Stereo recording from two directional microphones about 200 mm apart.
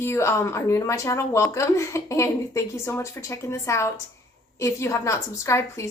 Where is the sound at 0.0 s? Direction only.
15° left (ahead or behind).